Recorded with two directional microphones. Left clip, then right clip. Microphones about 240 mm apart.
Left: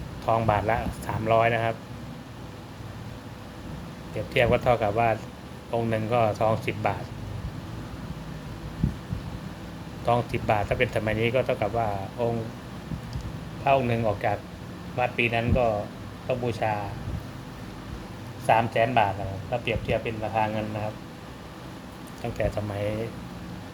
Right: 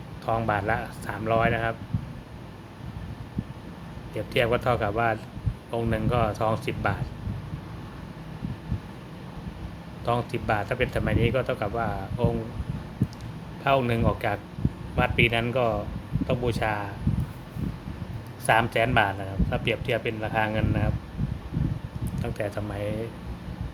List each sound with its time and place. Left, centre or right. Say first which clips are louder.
0.3 s speech: left 2 dB; centre
4.4 s speech: left 2 dB; centre
10.1 s speech: left 2 dB; centre
13.7 s speech: left 1 dB; centre
18.4 s speech: even; centre
22.2 s speech: left 3 dB; centre